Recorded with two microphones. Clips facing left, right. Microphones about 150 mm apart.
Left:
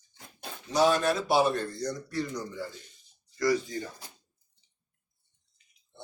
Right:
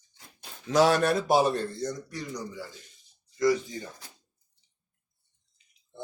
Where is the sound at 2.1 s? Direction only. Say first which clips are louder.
Left 3 dB; 15° right (ahead or behind).